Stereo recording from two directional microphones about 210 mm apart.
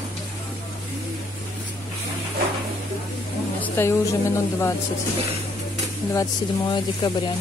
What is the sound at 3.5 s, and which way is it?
Speech, 10° left (ahead or behind).